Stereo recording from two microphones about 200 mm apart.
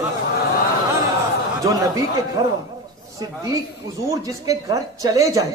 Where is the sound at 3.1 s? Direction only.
15° right (ahead or behind).